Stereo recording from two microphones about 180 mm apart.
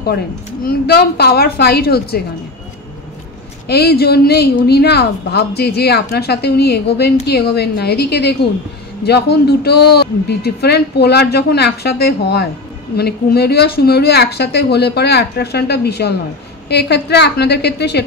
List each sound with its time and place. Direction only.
0.7 s speech: 60° left (ahead or behind)
3.6 s a woman's voice: 65° left (ahead or behind)